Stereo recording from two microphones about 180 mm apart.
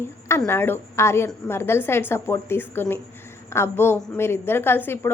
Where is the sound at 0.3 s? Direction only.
15° left (ahead or behind).